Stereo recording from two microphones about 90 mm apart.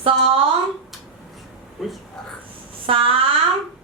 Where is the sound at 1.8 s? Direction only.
Centre (ahead or behind).